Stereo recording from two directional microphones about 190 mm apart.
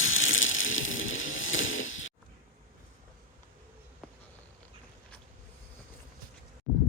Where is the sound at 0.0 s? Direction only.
90° left.